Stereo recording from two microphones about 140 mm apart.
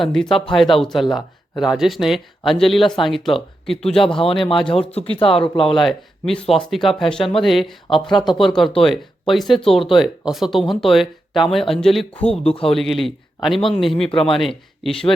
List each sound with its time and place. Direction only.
0.0 s speech: centre (ahead or behind)
4.1 s speech: 40° left (ahead or behind)
5.6 s speech: centre (ahead or behind)
14.1 s speech: 40° left (ahead or behind)
14.3 s speech: centre (ahead or behind)